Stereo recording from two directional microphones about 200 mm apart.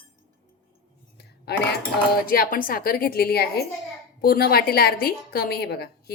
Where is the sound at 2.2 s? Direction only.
45° left (ahead or behind).